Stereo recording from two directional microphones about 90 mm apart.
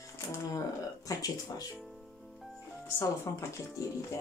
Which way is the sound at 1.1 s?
40° left (ahead or behind).